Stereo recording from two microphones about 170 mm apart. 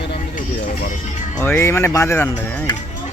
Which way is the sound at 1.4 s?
15° left (ahead or behind).